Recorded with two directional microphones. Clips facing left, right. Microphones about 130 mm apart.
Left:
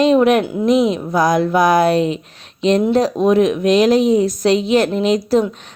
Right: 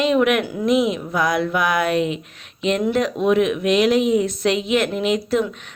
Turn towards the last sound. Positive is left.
turn(degrees=35)  # may be behind; listen again after turning